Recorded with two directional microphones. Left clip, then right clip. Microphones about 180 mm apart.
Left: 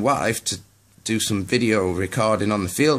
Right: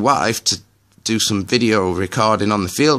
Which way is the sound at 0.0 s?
40° right (ahead or behind).